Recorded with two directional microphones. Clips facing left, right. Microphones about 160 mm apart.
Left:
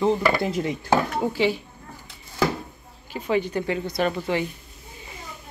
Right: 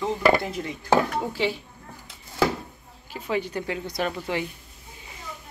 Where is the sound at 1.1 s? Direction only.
5° left (ahead or behind).